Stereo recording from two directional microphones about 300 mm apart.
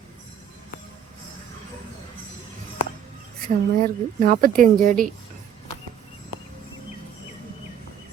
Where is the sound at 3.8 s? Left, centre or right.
Right.